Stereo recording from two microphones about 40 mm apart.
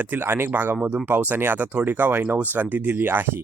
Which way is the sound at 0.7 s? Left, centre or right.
Right.